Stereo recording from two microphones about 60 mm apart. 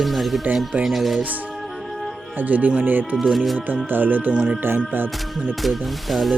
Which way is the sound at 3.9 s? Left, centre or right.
Right.